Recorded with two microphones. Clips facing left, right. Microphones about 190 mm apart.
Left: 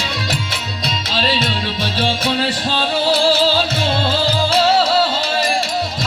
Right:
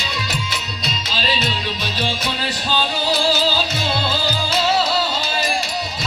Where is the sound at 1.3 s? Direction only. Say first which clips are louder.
Left 3 dB; 30° left (ahead or behind).